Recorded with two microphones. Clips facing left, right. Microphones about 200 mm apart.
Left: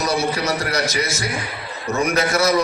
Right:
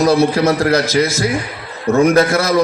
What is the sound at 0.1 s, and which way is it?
A man's voice, 55° right (ahead or behind).